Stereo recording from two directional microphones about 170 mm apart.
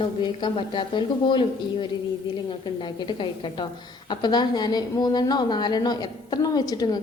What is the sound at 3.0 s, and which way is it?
A woman's voice, 30° left (ahead or behind).